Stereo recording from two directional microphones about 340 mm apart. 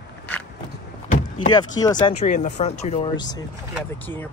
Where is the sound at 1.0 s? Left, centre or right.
Left.